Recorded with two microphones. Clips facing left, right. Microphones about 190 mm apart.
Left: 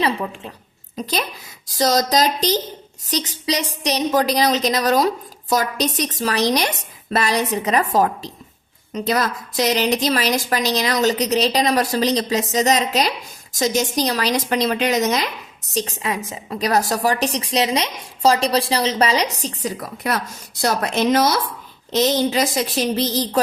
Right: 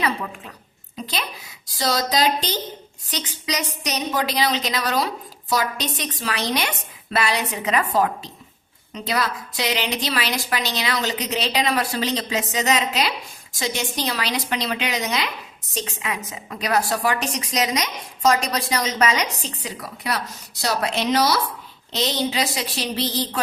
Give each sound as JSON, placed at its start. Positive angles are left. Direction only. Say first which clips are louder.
{"t": 0.9, "sound": "a woman's voice", "louder": "left 5 dB", "side_deg": 40}